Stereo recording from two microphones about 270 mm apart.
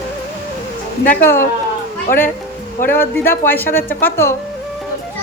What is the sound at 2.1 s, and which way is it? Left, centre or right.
Speech, left.